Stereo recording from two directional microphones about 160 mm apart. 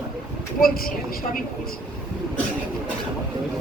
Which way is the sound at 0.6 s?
65° left (ahead or behind).